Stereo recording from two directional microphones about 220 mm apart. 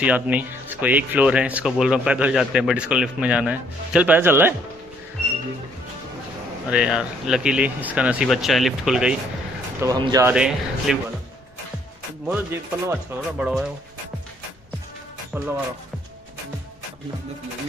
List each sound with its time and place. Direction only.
0.0 s speech: 5° right (ahead or behind)
6.7 s speech: 5° right (ahead or behind)
9.8 s speech: 15° right (ahead or behind)
10.3 s speech: 5° right (ahead or behind)
12.3 s speech: 10° right (ahead or behind)
15.3 s speech: 5° right (ahead or behind)